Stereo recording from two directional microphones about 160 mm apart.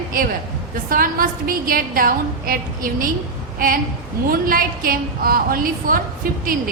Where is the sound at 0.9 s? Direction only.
60° right (ahead or behind).